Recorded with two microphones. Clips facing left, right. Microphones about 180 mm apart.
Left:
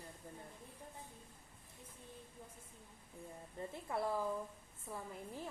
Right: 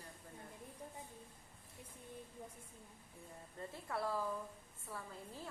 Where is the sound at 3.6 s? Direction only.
20° left (ahead or behind).